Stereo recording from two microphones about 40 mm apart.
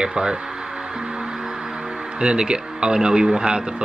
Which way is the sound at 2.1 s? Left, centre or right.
Right.